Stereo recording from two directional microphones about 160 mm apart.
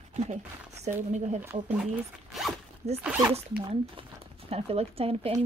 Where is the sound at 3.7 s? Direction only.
35° right (ahead or behind).